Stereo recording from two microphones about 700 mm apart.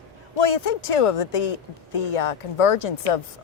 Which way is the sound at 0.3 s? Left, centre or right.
Left.